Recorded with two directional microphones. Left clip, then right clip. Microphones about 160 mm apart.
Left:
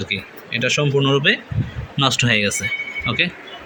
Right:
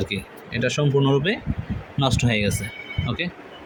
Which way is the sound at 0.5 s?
15° right (ahead or behind).